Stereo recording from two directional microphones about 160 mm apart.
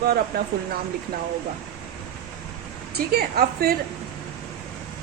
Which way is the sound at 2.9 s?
75° right (ahead or behind).